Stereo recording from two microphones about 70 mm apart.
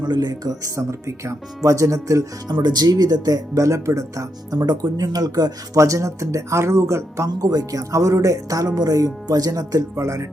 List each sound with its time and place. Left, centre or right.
0.0 s speech: right
0.8 s speech: right
2.5 s speech: right
4.8 s speech: right
7.3 s speech: right
9.9 s speech: right